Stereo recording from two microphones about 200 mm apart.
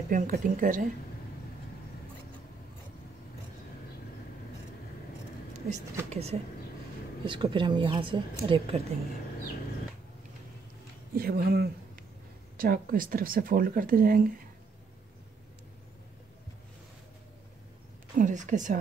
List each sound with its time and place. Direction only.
0.1 s speech: 40° right (ahead or behind)
5.7 s a woman's voice: 30° right (ahead or behind)
11.1 s speech: 50° right (ahead or behind)
18.1 s a woman's voice: 40° right (ahead or behind)